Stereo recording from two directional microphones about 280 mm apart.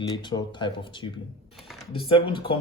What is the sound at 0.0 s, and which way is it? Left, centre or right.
Speech, centre.